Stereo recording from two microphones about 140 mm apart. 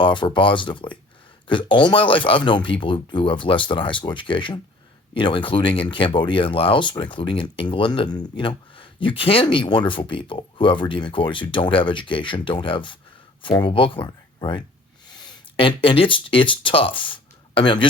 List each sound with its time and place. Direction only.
0.0 s speech: 35° left (ahead or behind)